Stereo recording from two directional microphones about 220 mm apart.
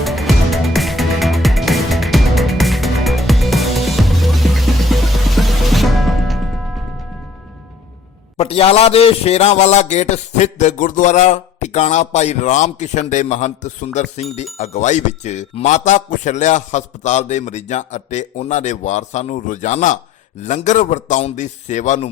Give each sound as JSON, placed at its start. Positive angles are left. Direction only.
{"t": 0.0, "sound": "music", "side_deg": 0}
{"t": 8.4, "sound": "a man's voice", "side_deg": 25}